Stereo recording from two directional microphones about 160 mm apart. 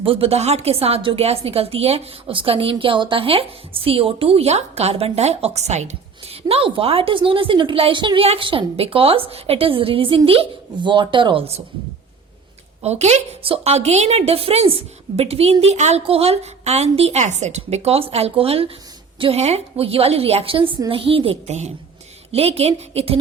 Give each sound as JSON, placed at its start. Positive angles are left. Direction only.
{"t": 0.0, "sound": "a woman's voice", "side_deg": -35}
{"t": 12.8, "sound": "a woman's voice", "side_deg": -45}